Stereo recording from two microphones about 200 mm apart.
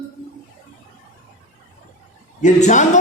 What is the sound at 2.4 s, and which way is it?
Speech, 35° left (ahead or behind).